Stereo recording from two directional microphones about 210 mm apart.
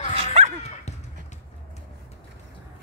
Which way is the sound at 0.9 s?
30° left (ahead or behind).